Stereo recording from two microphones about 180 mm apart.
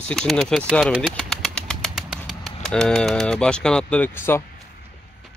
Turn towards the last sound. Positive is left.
turn(degrees=15)  # may be behind; listen again after turning